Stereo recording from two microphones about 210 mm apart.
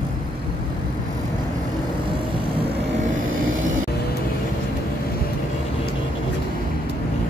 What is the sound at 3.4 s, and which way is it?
Vehicle, 70° right (ahead or behind).